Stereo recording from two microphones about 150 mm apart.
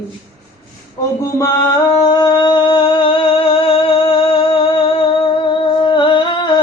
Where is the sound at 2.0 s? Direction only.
30° left (ahead or behind).